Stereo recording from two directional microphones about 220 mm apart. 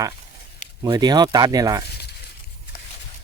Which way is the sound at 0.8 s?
20° right (ahead or behind).